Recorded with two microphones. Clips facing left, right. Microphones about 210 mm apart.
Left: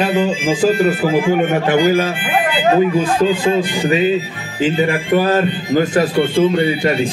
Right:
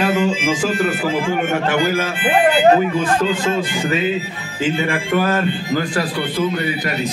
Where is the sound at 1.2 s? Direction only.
15° left (ahead or behind).